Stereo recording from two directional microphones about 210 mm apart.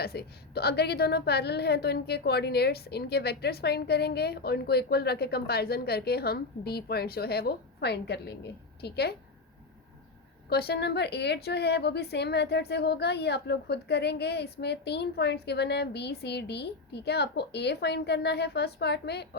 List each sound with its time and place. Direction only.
0.0 s a woman's voice: 50° left (ahead or behind)
10.5 s a woman's voice: 50° left (ahead or behind)